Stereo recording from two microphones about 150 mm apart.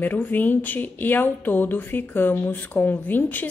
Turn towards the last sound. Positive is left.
turn(degrees=10)  # may be behind; listen again after turning